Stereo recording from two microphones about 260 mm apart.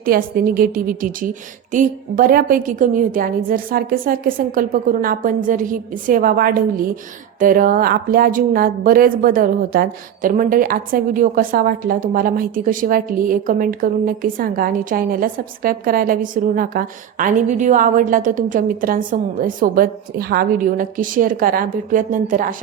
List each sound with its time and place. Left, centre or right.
0.0 s speech: right